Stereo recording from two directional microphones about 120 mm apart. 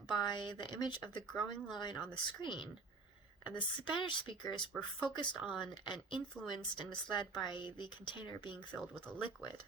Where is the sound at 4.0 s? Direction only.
40° left (ahead or behind).